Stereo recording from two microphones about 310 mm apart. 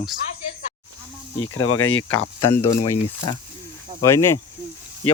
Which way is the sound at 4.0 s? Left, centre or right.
Centre.